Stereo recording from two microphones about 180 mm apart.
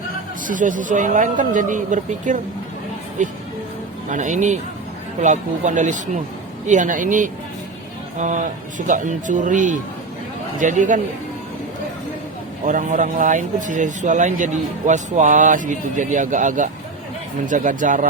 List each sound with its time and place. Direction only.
0.4 s speech: 45° right (ahead or behind)
4.1 s speech: 45° right (ahead or behind)
12.6 s speech: 45° right (ahead or behind)